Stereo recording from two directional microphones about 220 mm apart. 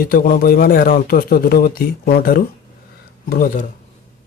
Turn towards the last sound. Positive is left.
turn(degrees=40)  # may be behind; listen again after turning